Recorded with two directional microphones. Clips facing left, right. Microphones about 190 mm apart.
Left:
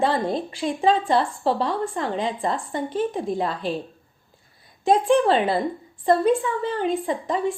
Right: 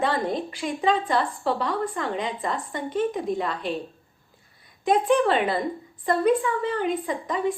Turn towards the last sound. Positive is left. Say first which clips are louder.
# left 2 dB
turn(degrees=30)  # may be behind; listen again after turning